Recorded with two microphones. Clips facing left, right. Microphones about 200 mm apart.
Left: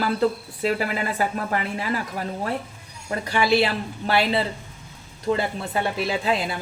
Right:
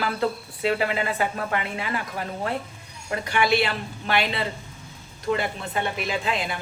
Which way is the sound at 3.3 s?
30° left (ahead or behind).